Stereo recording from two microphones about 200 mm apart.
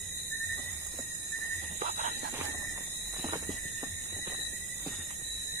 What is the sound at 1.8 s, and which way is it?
Squeal, 45° right (ahead or behind).